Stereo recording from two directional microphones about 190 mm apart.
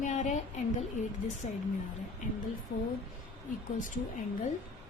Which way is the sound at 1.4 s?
30° left (ahead or behind).